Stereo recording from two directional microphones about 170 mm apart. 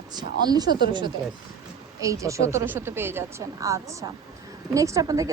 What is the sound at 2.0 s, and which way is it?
A woman's voice, 20° right (ahead or behind).